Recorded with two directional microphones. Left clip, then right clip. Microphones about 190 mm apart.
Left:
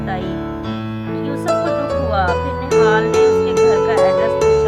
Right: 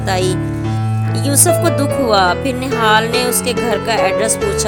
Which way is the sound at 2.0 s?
40° right (ahead or behind).